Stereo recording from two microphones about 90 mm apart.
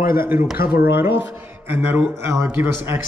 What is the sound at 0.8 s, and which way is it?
A man's voice, 25° right (ahead or behind).